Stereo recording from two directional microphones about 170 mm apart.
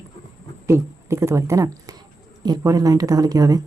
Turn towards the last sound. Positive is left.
turn(degrees=-20)  # may be behind; listen again after turning